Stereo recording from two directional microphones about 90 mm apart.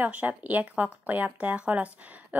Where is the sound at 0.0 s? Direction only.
15° right (ahead or behind).